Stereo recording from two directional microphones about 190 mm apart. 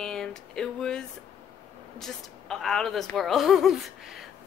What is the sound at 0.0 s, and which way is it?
Speech, 5° left (ahead or behind).